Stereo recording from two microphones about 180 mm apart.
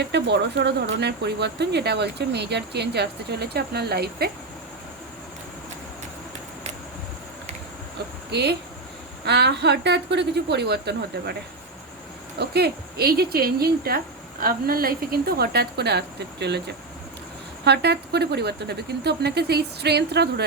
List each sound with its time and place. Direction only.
0.0 s speech: 70° right (ahead or behind)
8.3 s speech: 65° right (ahead or behind)
12.4 s speech: 65° right (ahead or behind)
17.7 s speech: 65° right (ahead or behind)